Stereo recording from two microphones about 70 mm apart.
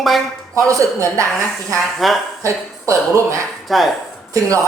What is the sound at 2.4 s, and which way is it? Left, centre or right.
Speech, right.